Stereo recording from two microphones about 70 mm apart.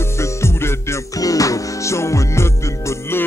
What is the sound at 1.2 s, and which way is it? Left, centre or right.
Music, left.